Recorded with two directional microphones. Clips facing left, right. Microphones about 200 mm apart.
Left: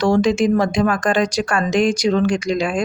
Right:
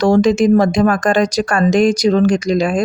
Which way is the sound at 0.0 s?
40° right (ahead or behind).